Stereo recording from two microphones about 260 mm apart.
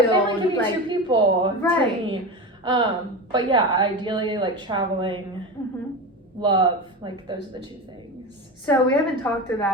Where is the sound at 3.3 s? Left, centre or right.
Centre.